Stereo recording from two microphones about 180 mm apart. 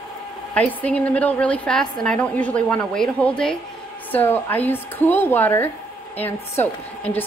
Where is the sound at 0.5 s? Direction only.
10° left (ahead or behind).